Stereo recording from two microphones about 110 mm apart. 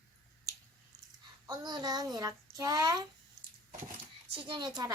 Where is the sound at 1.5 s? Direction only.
35° right (ahead or behind).